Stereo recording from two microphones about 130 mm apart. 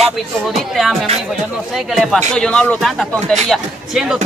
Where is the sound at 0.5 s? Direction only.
Centre (ahead or behind).